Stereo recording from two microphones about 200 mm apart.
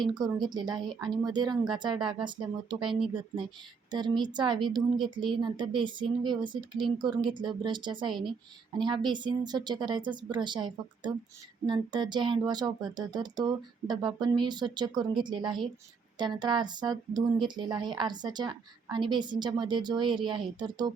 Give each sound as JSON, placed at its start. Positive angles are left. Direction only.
{"t": 0.0, "sound": "speech", "side_deg": -20}